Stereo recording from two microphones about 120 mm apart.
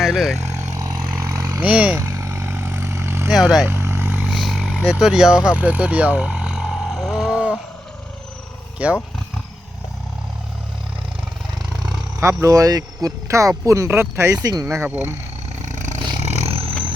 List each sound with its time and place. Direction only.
0.0 s speech: 5° right (ahead or behind)
0.4 s vehicle: 25° right (ahead or behind)
1.6 s speech: 10° right (ahead or behind)
2.0 s vehicle: 25° right (ahead or behind)
3.2 s speech: centre (ahead or behind)
3.7 s vehicle: 20° right (ahead or behind)
4.4 s vehicle: centre (ahead or behind)
8.8 s speech: 10° right (ahead or behind)
12.2 s speech: 25° right (ahead or behind)
15.6 s a sound: 90° right
16.2 s roar: 65° right (ahead or behind)